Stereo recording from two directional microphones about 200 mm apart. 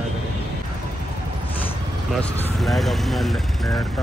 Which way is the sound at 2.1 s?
5° left (ahead or behind).